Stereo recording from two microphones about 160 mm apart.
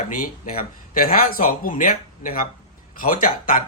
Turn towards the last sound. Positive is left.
turn(degrees=55)  # may be behind; listen again after turning